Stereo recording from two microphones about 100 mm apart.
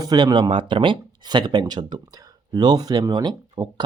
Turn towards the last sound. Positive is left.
turn(degrees=-45)  # may be behind; listen again after turning